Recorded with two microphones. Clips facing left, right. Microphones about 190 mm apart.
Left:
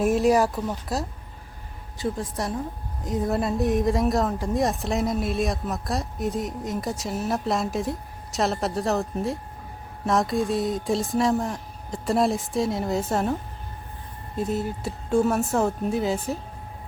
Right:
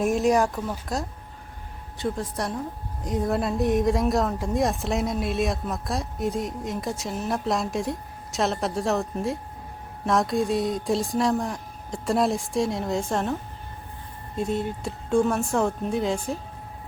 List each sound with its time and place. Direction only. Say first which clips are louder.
0.0 s speech: left 1 dB; centre (ahead or behind)
14.3 s speech: even; 5° left (ahead or behind)